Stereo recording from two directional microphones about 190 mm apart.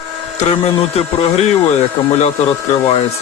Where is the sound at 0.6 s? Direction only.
30° left (ahead or behind).